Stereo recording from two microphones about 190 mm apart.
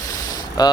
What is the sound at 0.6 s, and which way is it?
Speech, 20° left (ahead or behind).